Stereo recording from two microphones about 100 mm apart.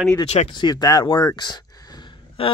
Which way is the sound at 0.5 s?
45° left (ahead or behind).